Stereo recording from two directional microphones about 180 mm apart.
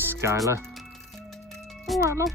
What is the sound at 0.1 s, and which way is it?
Music, 15° right (ahead or behind).